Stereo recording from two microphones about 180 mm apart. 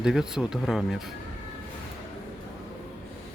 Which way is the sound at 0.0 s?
5° right (ahead or behind).